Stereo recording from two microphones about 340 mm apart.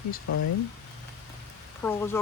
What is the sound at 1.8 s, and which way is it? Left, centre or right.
Speech, centre.